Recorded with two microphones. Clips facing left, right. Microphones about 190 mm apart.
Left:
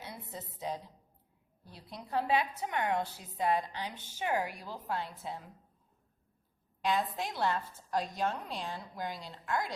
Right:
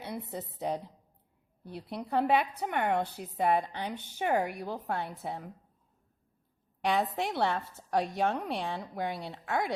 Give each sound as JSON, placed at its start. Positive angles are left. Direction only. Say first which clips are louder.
{"t": 0.0, "sound": "a woman's voice", "louder": "right 7 dB", "side_deg": -60}
{"t": 6.8, "sound": "a woman's voice", "louder": "right 3 dB", "side_deg": -65}